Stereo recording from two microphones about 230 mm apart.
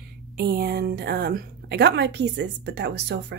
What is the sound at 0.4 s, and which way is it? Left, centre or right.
A woman's voice, right.